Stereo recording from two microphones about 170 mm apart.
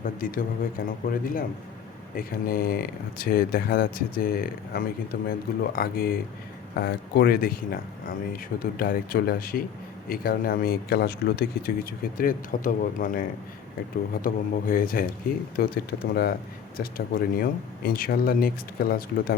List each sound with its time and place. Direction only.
0.0 s speech: 55° left (ahead or behind)
15.5 s speech: 70° left (ahead or behind)